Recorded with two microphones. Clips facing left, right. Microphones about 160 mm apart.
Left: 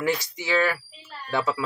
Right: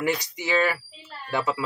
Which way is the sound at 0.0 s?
15° right (ahead or behind).